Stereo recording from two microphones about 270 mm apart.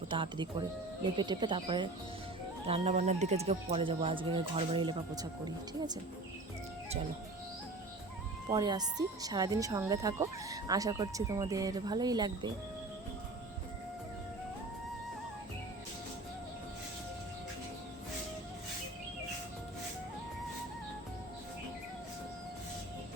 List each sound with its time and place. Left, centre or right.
0.1 s speech: centre
8.4 s speech: centre